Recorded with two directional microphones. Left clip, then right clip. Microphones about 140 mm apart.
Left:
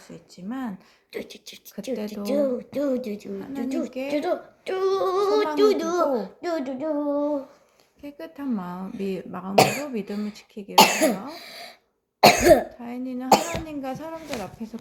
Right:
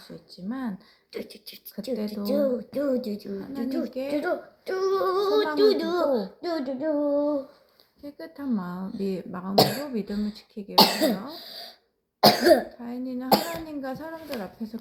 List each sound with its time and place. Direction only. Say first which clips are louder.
0.4 s speech: left 1 dB; 15° left (ahead or behind)
1.1 s beatboxing: left 2 dB; 35° left (ahead or behind)
1.7 s a woman's voice: left 1 dB; 20° left (ahead or behind); by 3.8 s 35° left (ahead or behind)
3.9 s a woman's voice: left 2 dB; 20° left (ahead or behind)
4.6 s a sound: left 1 dB; 55° left (ahead or behind)
4.9 s speech: left 2 dB; 35° left (ahead or behind); by 6.9 s 15° left (ahead or behind)
8.0 s speech: left 2 dB; 15° left (ahead or behind)
11.4 s speech: left 1 dB; 55° left (ahead or behind)
12.2 s a woman's voice: left 3 dB; 25° left (ahead or behind)